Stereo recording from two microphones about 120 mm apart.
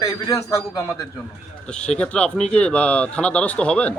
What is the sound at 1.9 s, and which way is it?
Speech, 10° left (ahead or behind).